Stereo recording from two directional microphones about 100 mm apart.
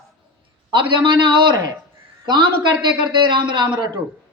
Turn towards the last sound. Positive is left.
turn(degrees=-50)  # may be behind; listen again after turning